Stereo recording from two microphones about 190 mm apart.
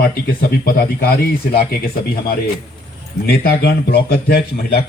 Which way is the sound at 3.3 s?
55° left (ahead or behind).